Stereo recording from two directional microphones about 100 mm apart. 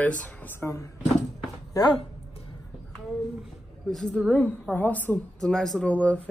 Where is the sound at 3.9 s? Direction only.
10° left (ahead or behind).